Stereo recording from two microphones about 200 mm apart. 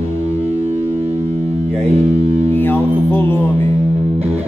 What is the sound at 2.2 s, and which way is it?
Speech, 30° right (ahead or behind).